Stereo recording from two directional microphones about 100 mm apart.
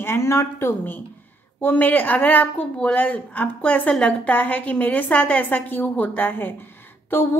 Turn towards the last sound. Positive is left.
turn(degrees=20)  # may be behind; listen again after turning